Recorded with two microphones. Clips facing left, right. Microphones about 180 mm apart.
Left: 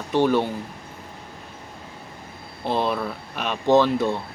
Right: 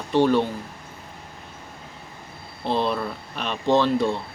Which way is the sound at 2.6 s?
10° left (ahead or behind).